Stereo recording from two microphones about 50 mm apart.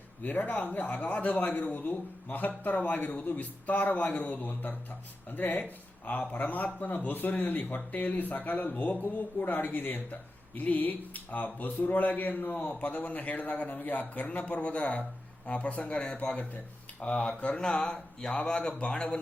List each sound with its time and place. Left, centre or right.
0.2 s a man's voice: left; by 18.8 s centre